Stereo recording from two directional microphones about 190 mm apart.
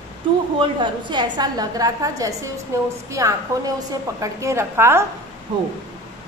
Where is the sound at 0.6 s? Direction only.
25° right (ahead or behind).